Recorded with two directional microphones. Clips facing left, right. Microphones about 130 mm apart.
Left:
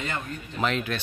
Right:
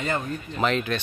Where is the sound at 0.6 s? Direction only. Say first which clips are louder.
Right 3 dB; 5° left (ahead or behind).